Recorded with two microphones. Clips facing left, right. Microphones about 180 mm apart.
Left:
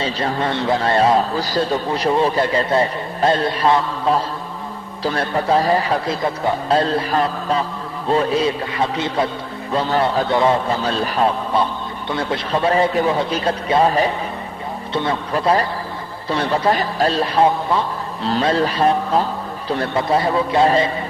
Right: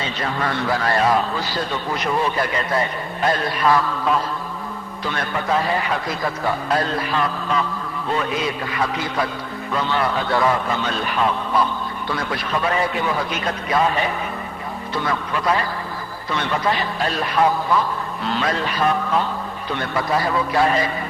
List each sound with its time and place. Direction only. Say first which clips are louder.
0.0 s a man's voice: left 4 dB; 30° left (ahead or behind)
10.2 s a man's voice: left 3 dB; 25° left (ahead or behind)